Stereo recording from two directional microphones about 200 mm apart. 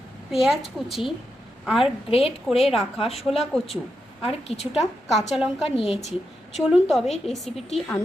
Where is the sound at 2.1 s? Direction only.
30° left (ahead or behind).